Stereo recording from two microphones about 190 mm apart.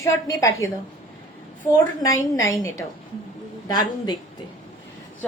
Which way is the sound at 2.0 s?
15° left (ahead or behind).